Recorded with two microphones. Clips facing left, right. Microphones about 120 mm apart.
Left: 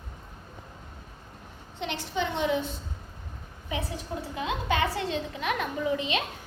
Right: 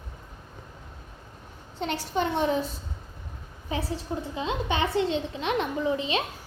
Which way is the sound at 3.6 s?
30° right (ahead or behind).